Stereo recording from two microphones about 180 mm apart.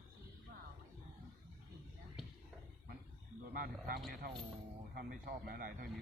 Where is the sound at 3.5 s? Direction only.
55° right (ahead or behind).